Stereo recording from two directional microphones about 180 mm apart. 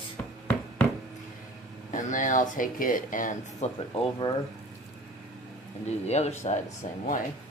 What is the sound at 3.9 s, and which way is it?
Speech, 30° left (ahead or behind).